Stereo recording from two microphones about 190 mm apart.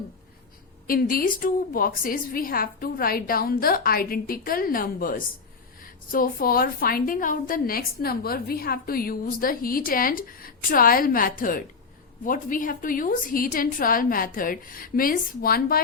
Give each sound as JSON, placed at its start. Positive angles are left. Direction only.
{"t": 0.9, "sound": "a woman's voice", "side_deg": 50}